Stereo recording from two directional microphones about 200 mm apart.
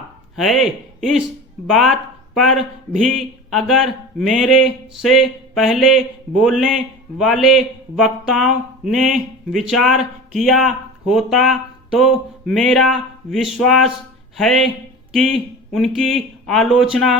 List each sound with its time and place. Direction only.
0.3 s a man's voice: centre (ahead or behind)